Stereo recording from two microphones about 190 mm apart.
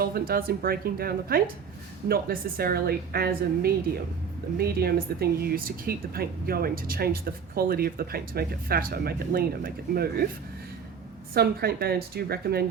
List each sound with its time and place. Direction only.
0.0 s a woman's voice: 50° right (ahead or behind)
11.3 s a woman's voice: 55° right (ahead or behind)